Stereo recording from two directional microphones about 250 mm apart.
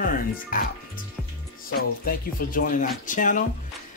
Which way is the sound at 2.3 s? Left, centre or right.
Left.